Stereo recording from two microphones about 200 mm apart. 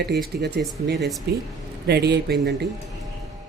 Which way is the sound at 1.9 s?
55° right (ahead or behind).